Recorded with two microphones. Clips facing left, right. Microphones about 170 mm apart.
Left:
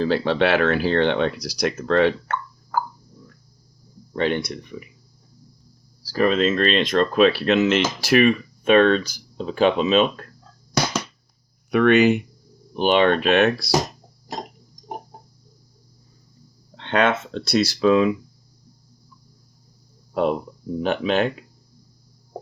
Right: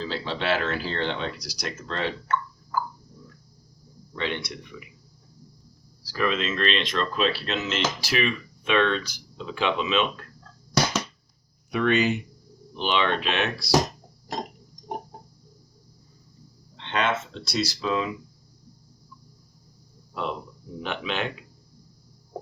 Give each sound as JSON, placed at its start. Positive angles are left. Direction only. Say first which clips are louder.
{"t": 0.0, "sound": "speech", "louder": "left 10 dB", "side_deg": 60}
{"t": 4.1, "sound": "speech", "louder": "left 8 dB", "side_deg": 45}
{"t": 6.0, "sound": "speech", "louder": "left 7 dB", "side_deg": 40}
{"t": 11.7, "sound": "speech", "louder": "left 7 dB", "side_deg": 60}
{"t": 12.7, "sound": "speech", "louder": "left 8 dB", "side_deg": 50}
{"t": 16.7, "sound": "speech", "louder": "left 6 dB", "side_deg": 55}
{"t": 20.8, "sound": "speech", "louder": "left 9 dB", "side_deg": 40}